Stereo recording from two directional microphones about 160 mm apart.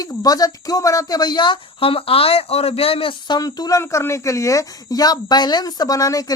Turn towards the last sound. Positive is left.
turn(degrees=20)  # may be behind; listen again after turning